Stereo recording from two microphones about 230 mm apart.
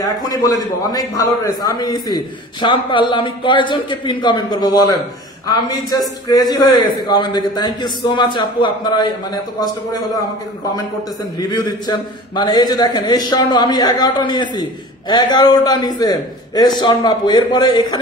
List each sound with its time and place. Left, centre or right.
0.9 s a man's voice: centre
11.3 s a man's voice: centre